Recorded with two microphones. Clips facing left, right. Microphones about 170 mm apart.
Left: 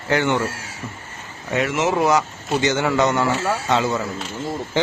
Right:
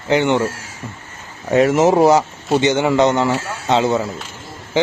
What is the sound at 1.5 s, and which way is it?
Speech, 35° right (ahead or behind).